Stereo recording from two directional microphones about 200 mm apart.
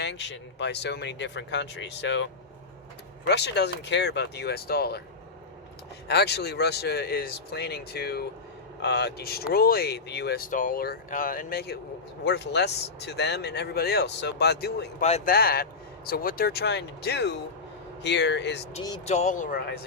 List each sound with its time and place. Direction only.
0.0 s speech: 60° left (ahead or behind)
6.1 s speech: 55° left (ahead or behind)
15.0 s speech: 35° left (ahead or behind)
15.3 s speech: 50° left (ahead or behind)
19.0 s speech: 35° left (ahead or behind)